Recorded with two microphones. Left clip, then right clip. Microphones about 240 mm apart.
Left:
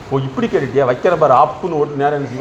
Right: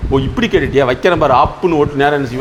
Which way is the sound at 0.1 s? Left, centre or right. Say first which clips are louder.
Right 3 dB; right.